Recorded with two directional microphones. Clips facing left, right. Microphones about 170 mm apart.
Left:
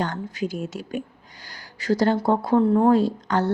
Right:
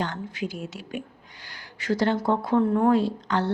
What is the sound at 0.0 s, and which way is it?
Speech, 40° left (ahead or behind).